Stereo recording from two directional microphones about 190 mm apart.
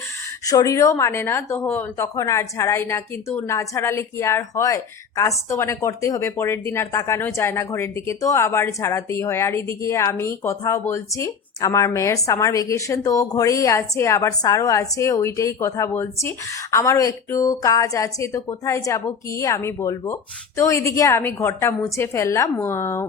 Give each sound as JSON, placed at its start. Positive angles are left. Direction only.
{"t": 0.4, "sound": "speech", "side_deg": 20}